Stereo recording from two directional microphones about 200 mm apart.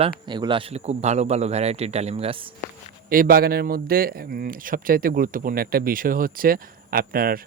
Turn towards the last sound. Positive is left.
turn(degrees=-45)  # may be behind; listen again after turning